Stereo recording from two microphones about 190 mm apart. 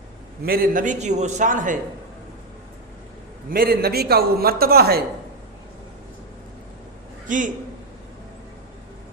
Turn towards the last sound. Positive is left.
turn(degrees=-40)  # may be behind; listen again after turning